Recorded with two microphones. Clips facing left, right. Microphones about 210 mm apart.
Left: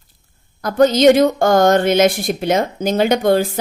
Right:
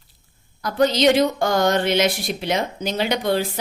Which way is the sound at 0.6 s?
50° left (ahead or behind).